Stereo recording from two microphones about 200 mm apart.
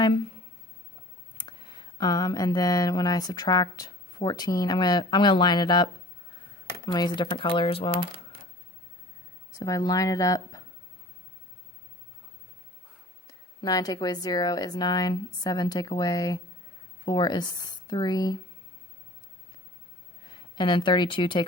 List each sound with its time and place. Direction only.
1.5 s speech: 20° left (ahead or behind)
9.6 s speech: 15° left (ahead or behind)
13.6 s speech: 20° left (ahead or behind)
20.3 s a woman's voice: 20° left (ahead or behind)